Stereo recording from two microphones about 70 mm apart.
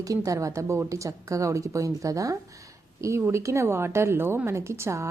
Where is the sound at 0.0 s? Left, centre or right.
Right.